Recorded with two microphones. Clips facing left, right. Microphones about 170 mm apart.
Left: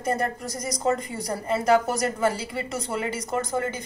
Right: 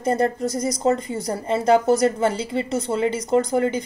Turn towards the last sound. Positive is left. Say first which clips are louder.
# right 8 dB
turn(degrees=-15)  # may be behind; listen again after turning